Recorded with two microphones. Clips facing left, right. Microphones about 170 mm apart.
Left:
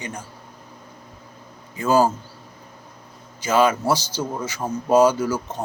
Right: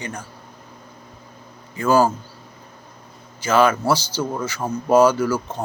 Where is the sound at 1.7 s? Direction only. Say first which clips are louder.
Right 1 dB; 20° left (ahead or behind).